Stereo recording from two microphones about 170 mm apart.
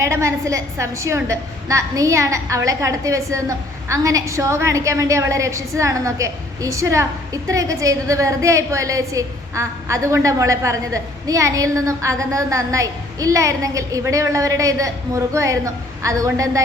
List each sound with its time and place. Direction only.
0.0 s a woman's voice: 15° right (ahead or behind)